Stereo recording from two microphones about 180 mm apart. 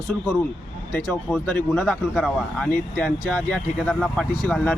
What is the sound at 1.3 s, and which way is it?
Speech, 10° left (ahead or behind).